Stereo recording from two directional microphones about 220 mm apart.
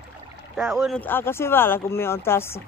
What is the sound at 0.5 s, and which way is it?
Speech, 5° right (ahead or behind).